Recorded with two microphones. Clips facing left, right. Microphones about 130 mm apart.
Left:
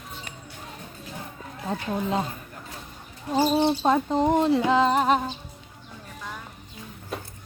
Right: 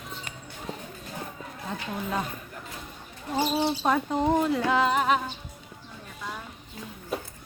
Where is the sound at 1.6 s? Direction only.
30° left (ahead or behind).